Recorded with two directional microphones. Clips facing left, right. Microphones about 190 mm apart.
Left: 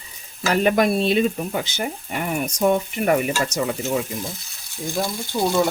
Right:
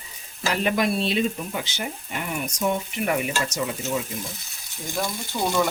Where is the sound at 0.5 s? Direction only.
45° left (ahead or behind).